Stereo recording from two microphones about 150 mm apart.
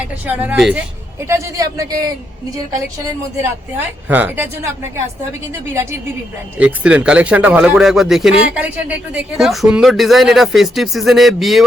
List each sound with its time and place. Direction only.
0.0 s a woman's voice: 10° right (ahead or behind)
1.3 s a man's voice: 20° right (ahead or behind)
3.4 s a woman's voice: 10° right (ahead or behind)